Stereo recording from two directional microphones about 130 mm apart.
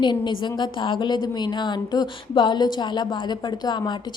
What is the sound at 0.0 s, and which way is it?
A woman's voice, 35° left (ahead or behind).